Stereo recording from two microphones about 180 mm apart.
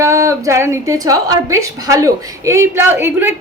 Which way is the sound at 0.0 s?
15° right (ahead or behind).